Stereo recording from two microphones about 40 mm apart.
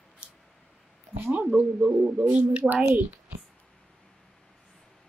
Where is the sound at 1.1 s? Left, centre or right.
Right.